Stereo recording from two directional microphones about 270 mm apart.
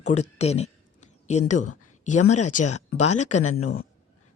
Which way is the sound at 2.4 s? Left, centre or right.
Left.